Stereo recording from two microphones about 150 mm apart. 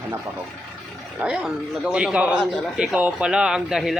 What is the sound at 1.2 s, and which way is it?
A man's voice, 10° right (ahead or behind).